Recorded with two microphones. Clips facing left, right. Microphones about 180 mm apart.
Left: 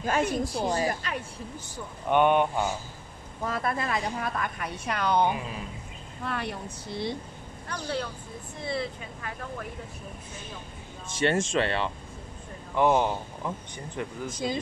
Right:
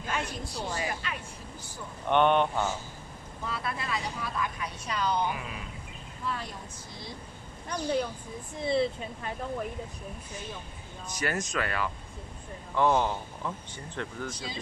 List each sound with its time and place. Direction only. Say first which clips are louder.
0.0 s a woman's voice: left 8 dB; 45° left (ahead or behind)
2.0 s speech: left 2 dB; 10° left (ahead or behind)
3.4 s a woman's voice: left 5 dB; 50° left (ahead or behind)
5.3 s speech: left 4 dB; 30° left (ahead or behind)
6.2 s a woman's voice: left 3 dB; 65° left (ahead or behind)
7.6 s speech: right 3 dB; 15° right (ahead or behind)
11.1 s speech: left 7 dB; 25° left (ahead or behind)
12.7 s speech: left 2 dB; 15° left (ahead or behind)